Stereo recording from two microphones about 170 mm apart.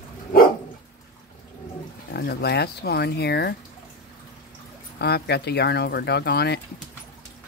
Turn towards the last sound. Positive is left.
turn(degrees=75)  # may be behind; listen again after turning